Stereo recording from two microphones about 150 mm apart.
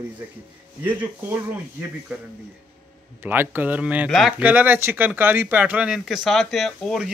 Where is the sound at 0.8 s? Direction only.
15° right (ahead or behind).